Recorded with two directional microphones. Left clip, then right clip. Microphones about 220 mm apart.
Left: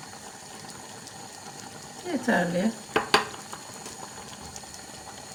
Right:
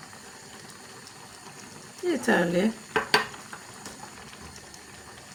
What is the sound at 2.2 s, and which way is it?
Speech, 55° right (ahead or behind).